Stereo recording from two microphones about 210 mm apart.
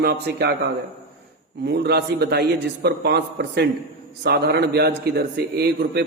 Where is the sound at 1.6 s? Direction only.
50° right (ahead or behind).